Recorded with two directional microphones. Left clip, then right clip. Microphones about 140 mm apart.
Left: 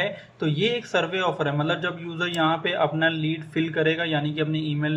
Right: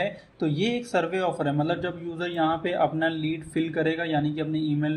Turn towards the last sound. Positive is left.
turn(degrees=-35)  # may be behind; listen again after turning